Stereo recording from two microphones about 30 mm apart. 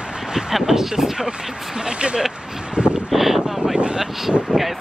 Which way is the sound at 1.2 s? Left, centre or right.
Right.